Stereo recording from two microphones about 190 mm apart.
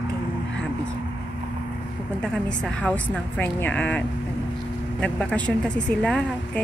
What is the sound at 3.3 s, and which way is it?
Speech, 10° left (ahead or behind).